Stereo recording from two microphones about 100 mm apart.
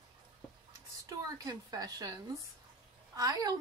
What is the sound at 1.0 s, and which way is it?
Speech, 35° right (ahead or behind).